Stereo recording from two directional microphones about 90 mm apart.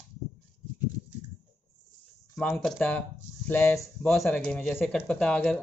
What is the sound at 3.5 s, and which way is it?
Speech, 25° left (ahead or behind).